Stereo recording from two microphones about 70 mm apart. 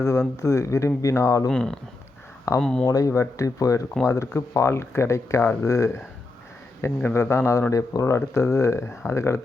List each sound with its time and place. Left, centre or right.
0.4 s speech: left
1.5 s speech: centre
2.8 s speech: left
6.8 s speech: left